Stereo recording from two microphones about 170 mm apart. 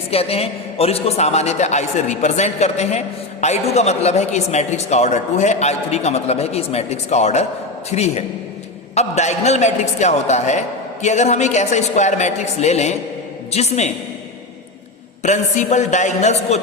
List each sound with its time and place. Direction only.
0.1 s a woman's voice: 35° left (ahead or behind)
15.2 s a woman's voice: 45° left (ahead or behind)